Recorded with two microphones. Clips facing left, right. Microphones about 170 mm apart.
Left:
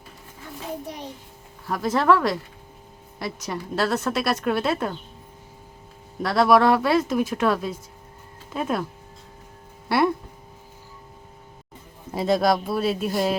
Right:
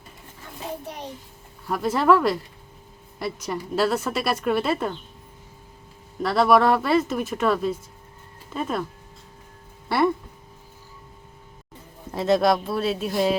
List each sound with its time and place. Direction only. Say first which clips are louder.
1.6 s speech: even; 5° right (ahead or behind)
6.2 s speech: left 1 dB; centre (ahead or behind)
9.9 s speech: even; 5° left (ahead or behind)
12.1 s speech: right 1 dB; centre (ahead or behind)